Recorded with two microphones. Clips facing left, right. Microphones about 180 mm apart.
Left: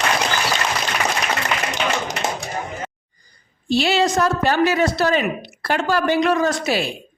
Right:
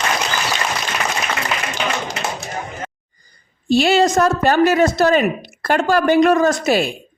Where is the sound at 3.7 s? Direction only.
50° right (ahead or behind).